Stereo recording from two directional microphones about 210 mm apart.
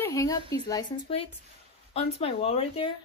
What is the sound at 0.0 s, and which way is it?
Speech, 15° left (ahead or behind).